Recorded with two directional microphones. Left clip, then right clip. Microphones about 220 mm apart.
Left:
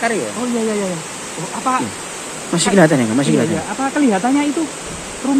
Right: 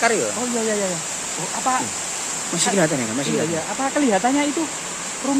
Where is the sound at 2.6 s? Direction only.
10° left (ahead or behind).